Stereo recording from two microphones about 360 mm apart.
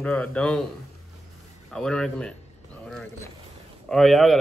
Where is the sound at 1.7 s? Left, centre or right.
Centre.